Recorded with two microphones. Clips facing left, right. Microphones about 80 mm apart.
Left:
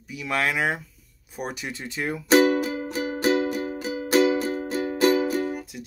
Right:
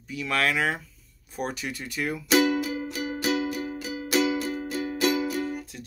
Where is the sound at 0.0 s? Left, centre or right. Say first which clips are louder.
Even; centre.